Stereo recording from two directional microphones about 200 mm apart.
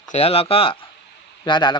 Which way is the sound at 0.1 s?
30° left (ahead or behind).